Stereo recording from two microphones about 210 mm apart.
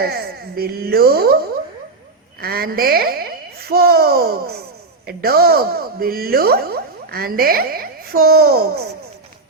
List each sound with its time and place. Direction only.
0.0 s speech: 50° right (ahead or behind)
2.4 s speech: 45° right (ahead or behind)